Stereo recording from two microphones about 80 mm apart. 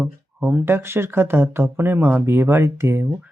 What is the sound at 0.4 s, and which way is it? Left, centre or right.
Speech, right.